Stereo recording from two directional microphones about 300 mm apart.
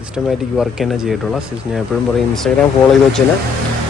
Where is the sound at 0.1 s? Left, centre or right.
Centre.